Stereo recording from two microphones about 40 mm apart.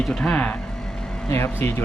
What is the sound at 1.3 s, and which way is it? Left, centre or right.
Speech, left.